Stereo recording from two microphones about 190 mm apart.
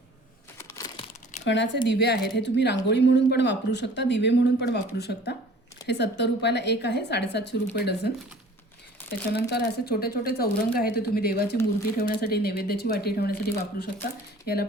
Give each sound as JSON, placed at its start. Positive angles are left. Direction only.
{"t": 0.7, "sound": "crumpling", "side_deg": 20}
{"t": 1.5, "sound": "speech", "side_deg": 70}
{"t": 9.3, "sound": "speech", "side_deg": 60}